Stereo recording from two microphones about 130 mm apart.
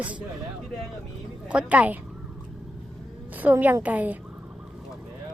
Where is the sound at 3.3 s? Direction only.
15° right (ahead or behind).